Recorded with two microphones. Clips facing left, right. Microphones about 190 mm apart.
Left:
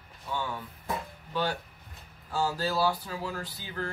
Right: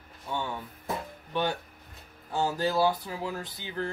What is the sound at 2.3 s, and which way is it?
Speech, 20° right (ahead or behind).